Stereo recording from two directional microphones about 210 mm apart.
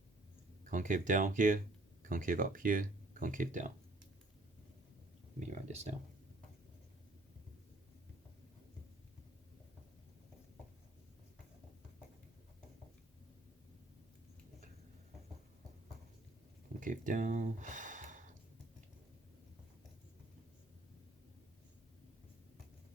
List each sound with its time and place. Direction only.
0.6 s speech: 40° right (ahead or behind)
5.5 s speech: 35° right (ahead or behind)
16.8 s a sound: 40° right (ahead or behind)